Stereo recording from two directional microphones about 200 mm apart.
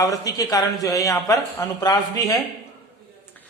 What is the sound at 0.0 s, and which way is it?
A man's voice, 15° left (ahead or behind).